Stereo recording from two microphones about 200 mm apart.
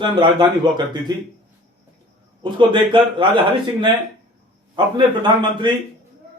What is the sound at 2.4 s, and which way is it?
Speech, 25° right (ahead or behind).